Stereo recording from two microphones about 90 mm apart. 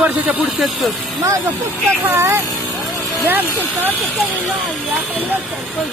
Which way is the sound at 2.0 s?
30° right (ahead or behind).